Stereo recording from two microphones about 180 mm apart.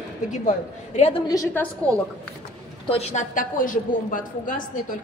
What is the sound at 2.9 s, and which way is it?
A woman's voice, 40° left (ahead or behind).